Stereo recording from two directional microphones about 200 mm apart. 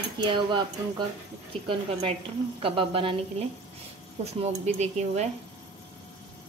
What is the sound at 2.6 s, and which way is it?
Cutlery, 25° right (ahead or behind).